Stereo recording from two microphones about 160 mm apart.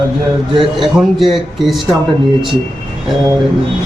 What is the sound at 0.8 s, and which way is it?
A man's voice, centre (ahead or behind).